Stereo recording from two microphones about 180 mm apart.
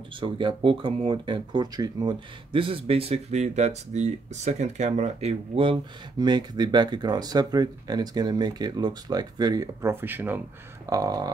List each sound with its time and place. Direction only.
0.2 s speech: 25° right (ahead or behind); by 10.4 s 10° right (ahead or behind)
10.9 s speech: 20° right (ahead or behind)